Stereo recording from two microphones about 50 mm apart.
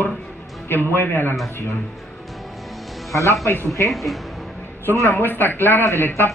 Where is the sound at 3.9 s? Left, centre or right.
Centre.